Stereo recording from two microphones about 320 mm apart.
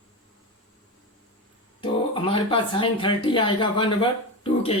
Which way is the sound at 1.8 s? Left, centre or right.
Centre.